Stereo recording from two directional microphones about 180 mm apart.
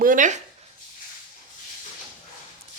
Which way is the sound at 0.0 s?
45° right (ahead or behind).